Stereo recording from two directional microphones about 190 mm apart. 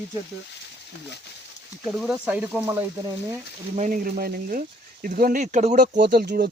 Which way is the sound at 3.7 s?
40° right (ahead or behind).